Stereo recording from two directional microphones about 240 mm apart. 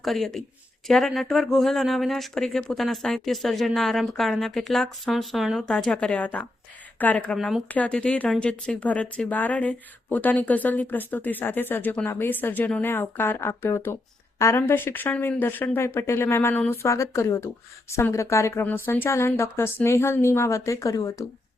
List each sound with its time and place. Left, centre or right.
0.0 s a woman's voice: centre